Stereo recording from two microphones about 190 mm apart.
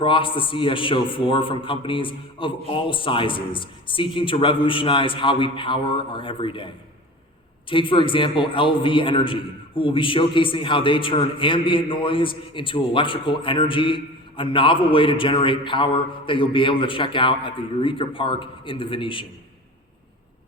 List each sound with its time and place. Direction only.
0.0 s a man's voice: 25° left (ahead or behind)
7.7 s a man's voice: 25° left (ahead or behind)